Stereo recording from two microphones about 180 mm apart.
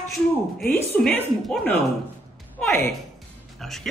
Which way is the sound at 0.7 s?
10° left (ahead or behind).